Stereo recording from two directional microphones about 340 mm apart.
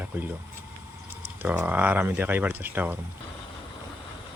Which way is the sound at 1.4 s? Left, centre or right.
Centre.